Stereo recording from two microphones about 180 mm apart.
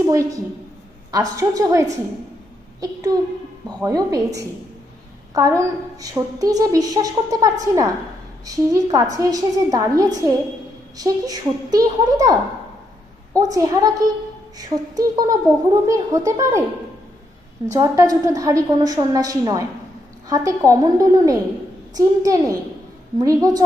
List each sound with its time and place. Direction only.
0.0 s a woman's voice: 15° right (ahead or behind)
17.7 s a woman's voice: 15° right (ahead or behind)